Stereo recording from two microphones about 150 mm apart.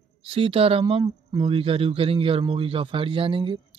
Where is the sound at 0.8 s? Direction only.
25° right (ahead or behind).